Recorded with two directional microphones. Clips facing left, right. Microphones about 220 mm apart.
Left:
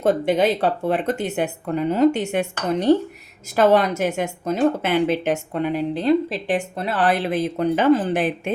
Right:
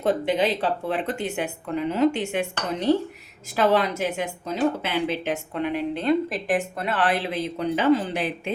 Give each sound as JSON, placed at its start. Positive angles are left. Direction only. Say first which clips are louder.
{"t": 0.0, "sound": "a woman's voice", "louder": "left 4 dB", "side_deg": 45}